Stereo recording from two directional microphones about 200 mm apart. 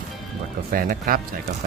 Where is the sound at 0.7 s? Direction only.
45° right (ahead or behind).